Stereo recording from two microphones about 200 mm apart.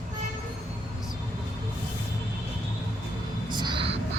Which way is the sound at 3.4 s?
20° right (ahead or behind).